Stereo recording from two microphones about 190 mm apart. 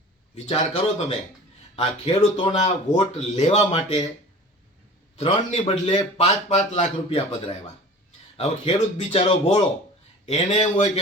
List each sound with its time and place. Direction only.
0.4 s a man's voice: 30° left (ahead or behind)
5.1 s speech: 35° left (ahead or behind)